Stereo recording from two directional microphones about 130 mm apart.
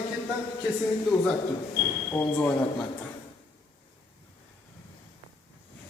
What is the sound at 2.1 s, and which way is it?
Speech, 20° left (ahead or behind).